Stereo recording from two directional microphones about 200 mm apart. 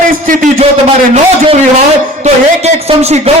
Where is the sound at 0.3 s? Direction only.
40° right (ahead or behind).